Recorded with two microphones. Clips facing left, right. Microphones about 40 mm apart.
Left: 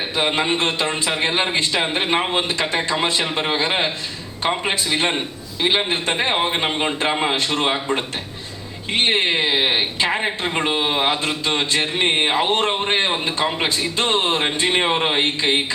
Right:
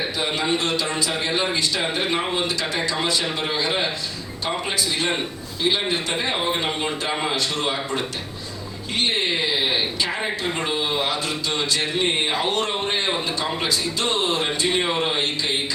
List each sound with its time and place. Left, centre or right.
0.2 s a woman's voice: left